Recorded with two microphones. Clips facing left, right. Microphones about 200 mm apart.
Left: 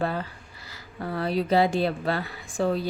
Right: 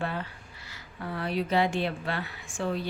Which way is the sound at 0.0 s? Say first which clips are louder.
Left 5 dB; 35° left (ahead or behind).